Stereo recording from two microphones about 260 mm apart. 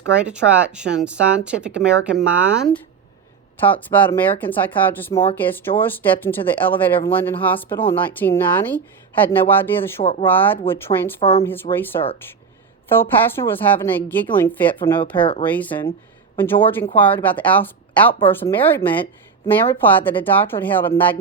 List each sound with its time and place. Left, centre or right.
0.1 s speech: centre
3.6 s speech: centre
10.0 s speech: left
10.2 s speech: centre
11.2 s speech: left
11.4 s speech: centre